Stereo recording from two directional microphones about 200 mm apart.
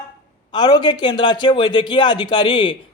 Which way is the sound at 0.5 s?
20° left (ahead or behind).